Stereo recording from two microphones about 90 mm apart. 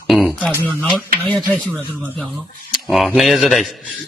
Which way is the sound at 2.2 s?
Centre (ahead or behind).